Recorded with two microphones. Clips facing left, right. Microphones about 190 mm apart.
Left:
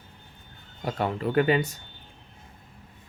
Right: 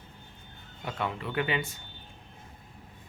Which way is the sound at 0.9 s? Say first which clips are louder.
Left 6 dB; 40° left (ahead or behind).